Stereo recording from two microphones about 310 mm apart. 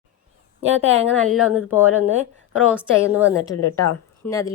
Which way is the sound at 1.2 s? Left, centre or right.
Centre.